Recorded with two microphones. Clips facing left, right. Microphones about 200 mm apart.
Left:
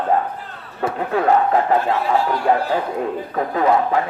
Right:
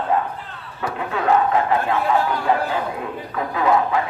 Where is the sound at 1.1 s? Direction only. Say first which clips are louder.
Left 2 dB; 40° left (ahead or behind).